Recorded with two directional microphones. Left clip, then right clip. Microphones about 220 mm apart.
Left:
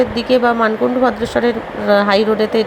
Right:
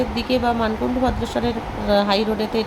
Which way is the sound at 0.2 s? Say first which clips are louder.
Left 6 dB; 15° left (ahead or behind).